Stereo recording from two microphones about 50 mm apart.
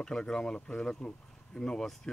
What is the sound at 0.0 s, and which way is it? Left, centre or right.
Speech, centre.